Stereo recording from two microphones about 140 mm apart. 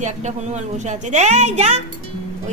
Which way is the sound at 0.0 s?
55° right (ahead or behind).